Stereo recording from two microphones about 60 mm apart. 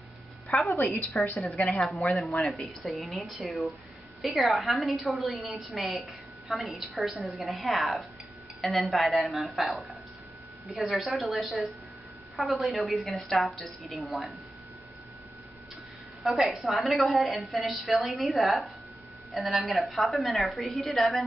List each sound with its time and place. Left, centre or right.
0.5 s a sound: centre
1.1 s a woman's voice: left
1.7 s a woman's voice: centre
5.7 s a woman's voice: centre
6.5 s a woman's voice: centre
16.4 s a woman's voice: centre